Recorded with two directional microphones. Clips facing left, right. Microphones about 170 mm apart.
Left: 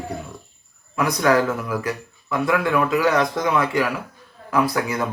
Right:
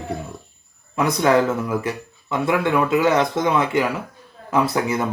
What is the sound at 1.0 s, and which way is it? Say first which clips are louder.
Speech: right 1 dB; 25° right (ahead or behind).